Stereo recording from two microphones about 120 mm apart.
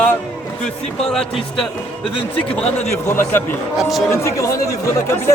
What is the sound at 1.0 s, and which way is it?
A man's voice, 5° left (ahead or behind).